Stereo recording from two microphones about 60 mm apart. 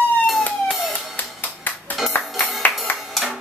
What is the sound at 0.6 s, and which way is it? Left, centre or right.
Music, centre.